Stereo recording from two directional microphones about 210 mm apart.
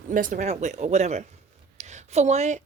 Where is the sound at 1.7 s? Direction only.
35° right (ahead or behind).